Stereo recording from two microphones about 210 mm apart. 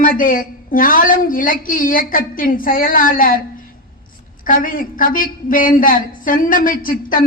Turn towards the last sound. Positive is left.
turn(degrees=40)  # may be behind; listen again after turning